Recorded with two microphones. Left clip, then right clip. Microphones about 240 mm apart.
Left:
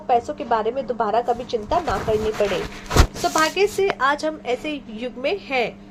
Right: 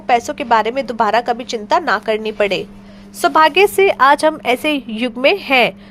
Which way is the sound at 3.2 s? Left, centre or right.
Right.